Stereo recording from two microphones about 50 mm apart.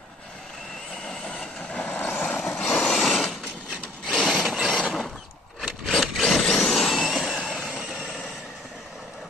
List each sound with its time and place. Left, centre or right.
1.0 s vehicle: centre
1.4 s vehicle: left
1.8 s vehicle: left
2.2 s vehicle: centre
4.1 s a sound: centre
5.9 s a sound: centre
7.4 s train: centre
7.7 s vehicle: right